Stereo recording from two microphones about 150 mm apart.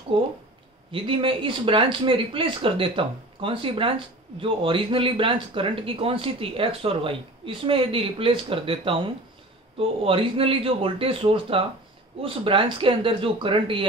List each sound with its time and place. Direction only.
0.1 s speech: 35° right (ahead or behind)